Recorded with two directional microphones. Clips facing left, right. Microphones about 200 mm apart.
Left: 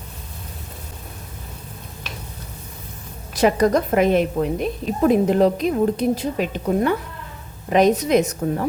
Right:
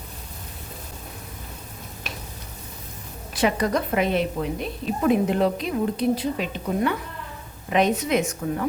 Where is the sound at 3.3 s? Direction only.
40° left (ahead or behind).